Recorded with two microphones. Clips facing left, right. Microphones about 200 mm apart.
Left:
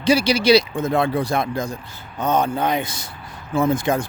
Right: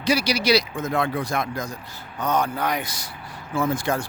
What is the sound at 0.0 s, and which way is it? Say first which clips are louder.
Speech: left 5 dB; 25° left (ahead or behind).